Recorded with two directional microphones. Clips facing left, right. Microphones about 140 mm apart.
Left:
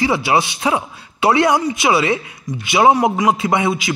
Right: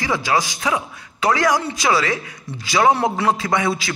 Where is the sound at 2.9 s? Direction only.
15° left (ahead or behind).